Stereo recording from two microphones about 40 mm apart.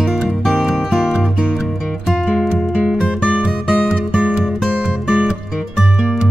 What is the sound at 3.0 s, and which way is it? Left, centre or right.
Music, right.